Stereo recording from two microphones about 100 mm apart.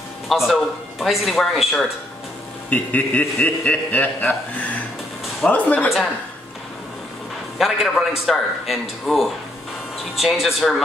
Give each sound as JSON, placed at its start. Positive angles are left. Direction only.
{"t": 0.3, "sound": "speech", "side_deg": 0}
{"t": 2.7, "sound": "speech", "side_deg": 15}
{"t": 5.5, "sound": "speech", "side_deg": 15}
{"t": 7.5, "sound": "speech", "side_deg": 0}